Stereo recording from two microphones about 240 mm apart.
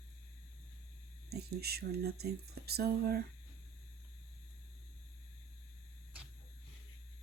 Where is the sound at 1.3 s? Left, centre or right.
Right.